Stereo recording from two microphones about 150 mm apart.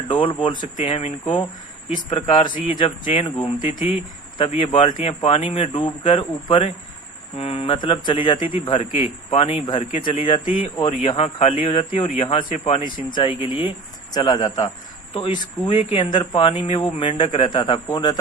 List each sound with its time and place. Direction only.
0.1 s a man's voice: 35° left (ahead or behind)
0.8 s a man's voice: 45° left (ahead or behind)
4.4 s a man's voice: 35° left (ahead or behind)